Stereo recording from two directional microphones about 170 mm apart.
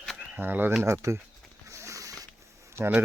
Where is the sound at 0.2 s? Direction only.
10° right (ahead or behind).